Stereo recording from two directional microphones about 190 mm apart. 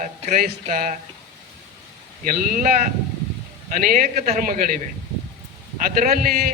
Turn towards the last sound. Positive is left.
turn(degrees=-45)  # may be behind; listen again after turning